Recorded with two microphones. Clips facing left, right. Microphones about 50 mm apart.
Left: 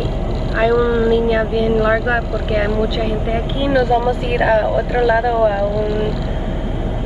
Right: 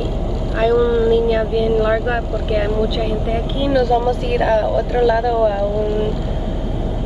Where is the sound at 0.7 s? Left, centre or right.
Left.